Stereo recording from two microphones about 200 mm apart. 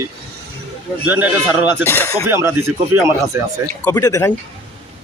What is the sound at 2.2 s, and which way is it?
Speech, 10° right (ahead or behind).